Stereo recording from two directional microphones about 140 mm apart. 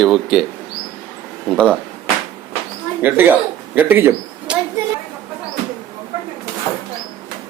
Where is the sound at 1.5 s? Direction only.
5° left (ahead or behind).